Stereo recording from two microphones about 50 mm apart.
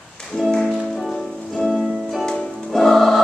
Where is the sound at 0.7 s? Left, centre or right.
Centre.